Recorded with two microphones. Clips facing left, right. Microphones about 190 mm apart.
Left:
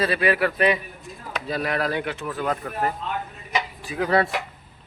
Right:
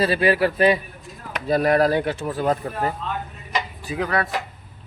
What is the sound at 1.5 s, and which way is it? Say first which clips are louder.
Speech: right 8 dB; 45° right (ahead or behind).